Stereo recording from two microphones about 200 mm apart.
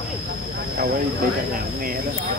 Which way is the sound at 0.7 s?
50° right (ahead or behind).